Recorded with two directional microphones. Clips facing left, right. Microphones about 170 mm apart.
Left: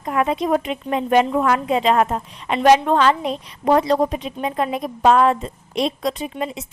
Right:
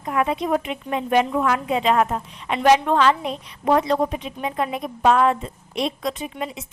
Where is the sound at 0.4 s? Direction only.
35° left (ahead or behind).